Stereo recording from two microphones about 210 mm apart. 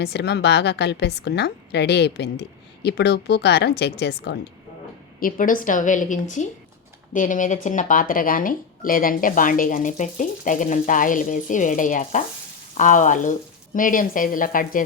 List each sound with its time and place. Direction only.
0.0 s a woman's voice: 50° left (ahead or behind)
5.2 s speech: 40° left (ahead or behind)